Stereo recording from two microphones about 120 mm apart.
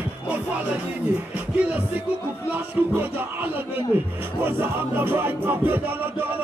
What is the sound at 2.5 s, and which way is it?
Music, 15° right (ahead or behind).